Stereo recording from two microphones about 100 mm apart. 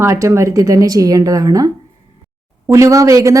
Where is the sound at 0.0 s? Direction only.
30° right (ahead or behind).